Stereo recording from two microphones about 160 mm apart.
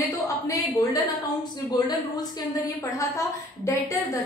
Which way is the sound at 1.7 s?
25° left (ahead or behind).